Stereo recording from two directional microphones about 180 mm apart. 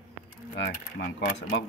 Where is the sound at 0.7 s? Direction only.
65° left (ahead or behind).